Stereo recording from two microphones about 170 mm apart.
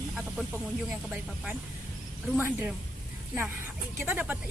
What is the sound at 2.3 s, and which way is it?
Speech, 10° right (ahead or behind).